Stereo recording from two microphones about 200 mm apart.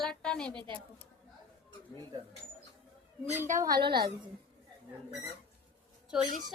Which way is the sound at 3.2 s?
10° right (ahead or behind).